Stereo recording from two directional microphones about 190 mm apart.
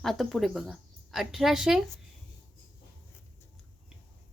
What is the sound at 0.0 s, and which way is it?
A woman's voice, centre (ahead or behind).